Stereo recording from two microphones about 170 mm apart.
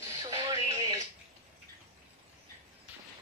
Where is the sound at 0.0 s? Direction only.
20° right (ahead or behind).